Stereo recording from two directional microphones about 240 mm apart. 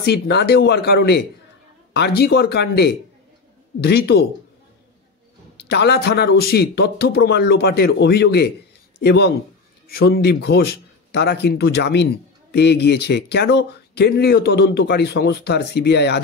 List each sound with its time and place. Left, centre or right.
0.0 s speech: left
5.6 s speech: left